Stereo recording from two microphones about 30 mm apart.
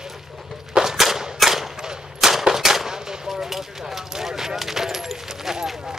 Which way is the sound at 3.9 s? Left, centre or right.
Centre.